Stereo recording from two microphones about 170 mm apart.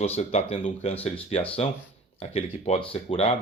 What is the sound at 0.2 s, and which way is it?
Speech, 40° left (ahead or behind).